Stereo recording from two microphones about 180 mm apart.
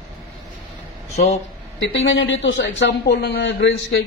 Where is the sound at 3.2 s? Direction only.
70° left (ahead or behind).